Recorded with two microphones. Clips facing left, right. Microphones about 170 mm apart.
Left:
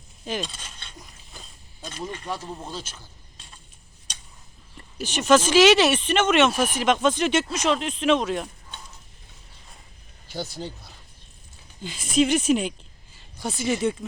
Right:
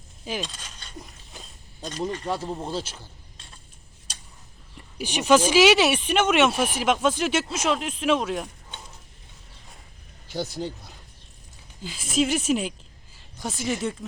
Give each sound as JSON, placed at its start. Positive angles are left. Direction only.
{"t": 0.3, "sound": "speech", "side_deg": 0}
{"t": 2.2, "sound": "speech", "side_deg": -35}
{"t": 4.9, "sound": "speech", "side_deg": -10}
{"t": 10.2, "sound": "speech", "side_deg": -20}
{"t": 11.8, "sound": "speech", "side_deg": 0}